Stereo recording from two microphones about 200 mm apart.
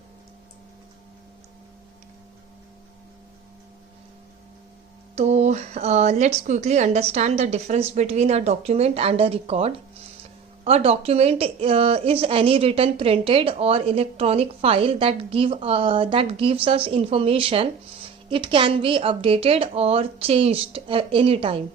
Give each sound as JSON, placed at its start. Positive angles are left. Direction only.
{"t": 5.1, "sound": "a woman's voice", "side_deg": -35}